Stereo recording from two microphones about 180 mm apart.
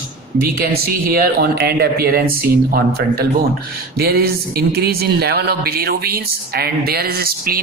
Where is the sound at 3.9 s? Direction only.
60° right (ahead or behind).